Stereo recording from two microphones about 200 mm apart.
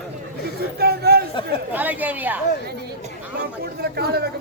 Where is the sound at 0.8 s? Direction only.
50° right (ahead or behind).